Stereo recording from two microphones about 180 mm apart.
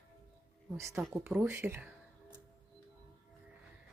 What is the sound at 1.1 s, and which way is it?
Speech, 10° right (ahead or behind).